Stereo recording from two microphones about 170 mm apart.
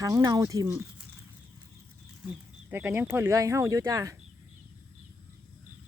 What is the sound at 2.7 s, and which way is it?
Speech, 15° right (ahead or behind).